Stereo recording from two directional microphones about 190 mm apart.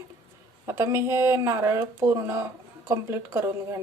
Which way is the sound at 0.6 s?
15° right (ahead or behind).